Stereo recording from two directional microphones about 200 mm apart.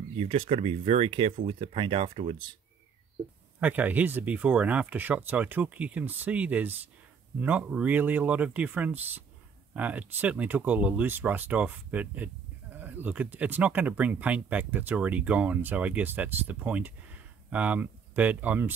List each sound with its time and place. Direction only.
0.1 s speech: 30° right (ahead or behind)
3.5 s speech: 10° right (ahead or behind)